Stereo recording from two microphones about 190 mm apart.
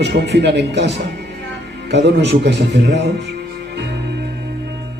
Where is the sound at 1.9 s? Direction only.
65° right (ahead or behind).